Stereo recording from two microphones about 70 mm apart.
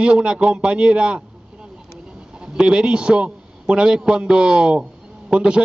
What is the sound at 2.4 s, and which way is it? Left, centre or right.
A man's voice, centre.